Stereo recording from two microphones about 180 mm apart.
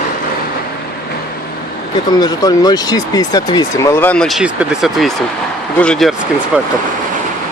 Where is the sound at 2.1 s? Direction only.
20° left (ahead or behind); by 6.7 s 5° right (ahead or behind).